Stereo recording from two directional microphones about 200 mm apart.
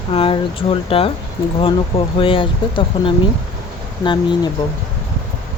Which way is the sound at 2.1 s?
25° left (ahead or behind).